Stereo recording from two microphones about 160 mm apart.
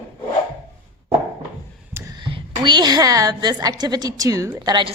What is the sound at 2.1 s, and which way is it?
A woman's voice, 30° right (ahead or behind).